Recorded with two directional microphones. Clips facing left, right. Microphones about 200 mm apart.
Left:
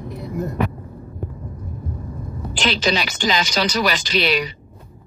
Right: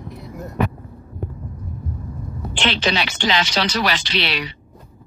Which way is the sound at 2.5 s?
40° left (ahead or behind).